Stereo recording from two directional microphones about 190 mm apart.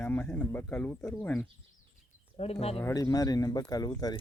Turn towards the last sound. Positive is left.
turn(degrees=20)  # may be behind; listen again after turning